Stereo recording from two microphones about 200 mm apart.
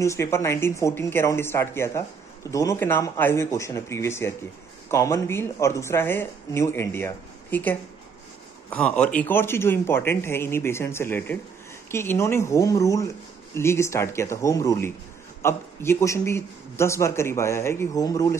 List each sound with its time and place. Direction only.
0.0 s a man's voice: 15° left (ahead or behind)